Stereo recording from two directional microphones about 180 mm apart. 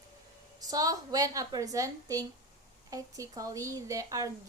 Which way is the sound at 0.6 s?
20° right (ahead or behind).